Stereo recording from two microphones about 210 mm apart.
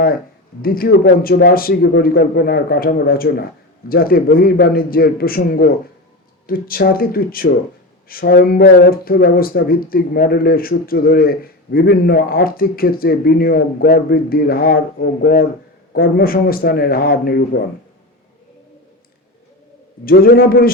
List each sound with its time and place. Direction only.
0.6 s speech: 45° left (ahead or behind)
20.1 s speech: 45° left (ahead or behind)